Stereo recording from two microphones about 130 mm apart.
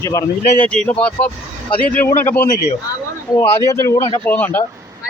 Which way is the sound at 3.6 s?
20° left (ahead or behind).